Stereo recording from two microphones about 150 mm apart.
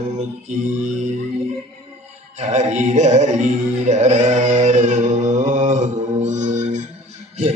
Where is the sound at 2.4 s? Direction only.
50° right (ahead or behind).